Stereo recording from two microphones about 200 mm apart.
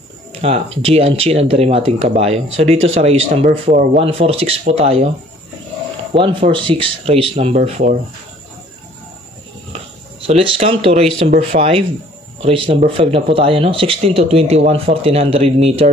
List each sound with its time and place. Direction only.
0.3 s speech: 30° right (ahead or behind)
6.1 s speech: 25° right (ahead or behind)
10.2 s speech: 30° right (ahead or behind)